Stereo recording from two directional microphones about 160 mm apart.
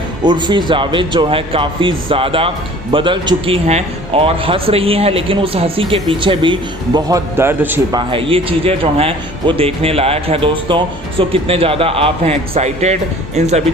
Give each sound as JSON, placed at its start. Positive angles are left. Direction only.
{"t": 0.2, "sound": "speech", "side_deg": -30}
{"t": 7.3, "sound": "a man's voice", "side_deg": -15}
{"t": 7.9, "sound": "speech", "side_deg": -35}